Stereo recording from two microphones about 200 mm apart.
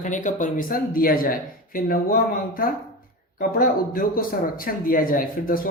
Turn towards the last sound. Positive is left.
turn(degrees=45)  # may be behind; listen again after turning